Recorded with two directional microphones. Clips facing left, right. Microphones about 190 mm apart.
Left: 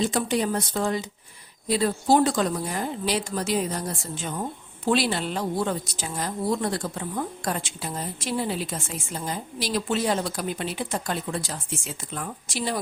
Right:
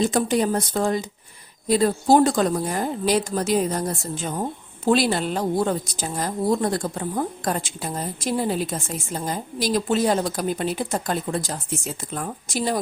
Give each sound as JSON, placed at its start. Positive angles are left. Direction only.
{"t": 0.0, "sound": "a woman's voice", "side_deg": -45}